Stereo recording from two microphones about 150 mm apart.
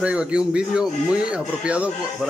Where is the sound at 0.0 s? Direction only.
5° right (ahead or behind).